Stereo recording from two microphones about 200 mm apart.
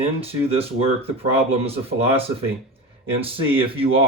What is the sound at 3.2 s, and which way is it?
Speech, 25° right (ahead or behind).